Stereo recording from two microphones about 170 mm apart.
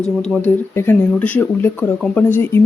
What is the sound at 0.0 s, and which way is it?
Speech, 5° left (ahead or behind).